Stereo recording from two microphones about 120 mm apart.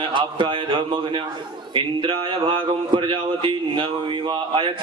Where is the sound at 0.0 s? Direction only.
45° right (ahead or behind).